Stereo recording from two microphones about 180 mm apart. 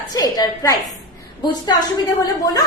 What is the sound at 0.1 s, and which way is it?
A woman's voice, 20° left (ahead or behind).